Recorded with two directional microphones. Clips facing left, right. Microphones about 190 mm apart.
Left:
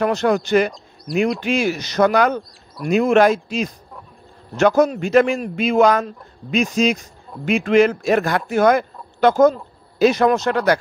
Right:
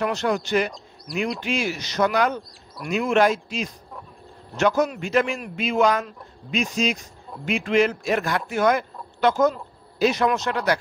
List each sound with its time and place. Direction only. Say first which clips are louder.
0.0 s a man's voice: left 6 dB; 50° left (ahead or behind)
4.8 s speech: left 7 dB; 40° left (ahead or behind)